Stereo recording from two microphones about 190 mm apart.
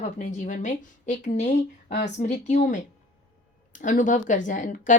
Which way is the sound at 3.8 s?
40° left (ahead or behind).